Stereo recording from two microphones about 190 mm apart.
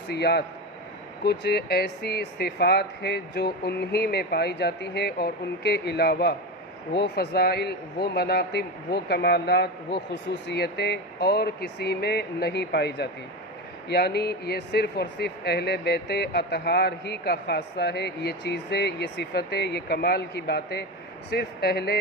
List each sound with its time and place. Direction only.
0.1 s speech: 60° left (ahead or behind)